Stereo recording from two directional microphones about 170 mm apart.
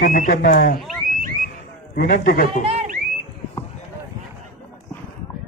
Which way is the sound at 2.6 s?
35° right (ahead or behind).